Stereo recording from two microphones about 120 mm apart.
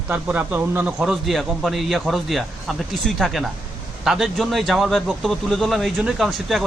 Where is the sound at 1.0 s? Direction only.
Centre (ahead or behind).